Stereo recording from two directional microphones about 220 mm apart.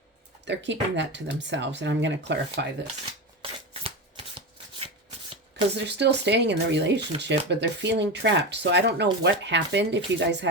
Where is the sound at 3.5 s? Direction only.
25° right (ahead or behind).